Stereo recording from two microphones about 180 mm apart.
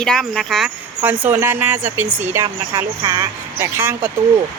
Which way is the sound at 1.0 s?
10° right (ahead or behind).